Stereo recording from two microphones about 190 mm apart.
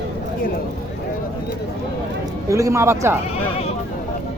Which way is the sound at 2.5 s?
15° right (ahead or behind).